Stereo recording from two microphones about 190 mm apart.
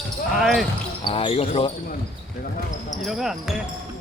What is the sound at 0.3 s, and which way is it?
Basketball bounce, centre (ahead or behind).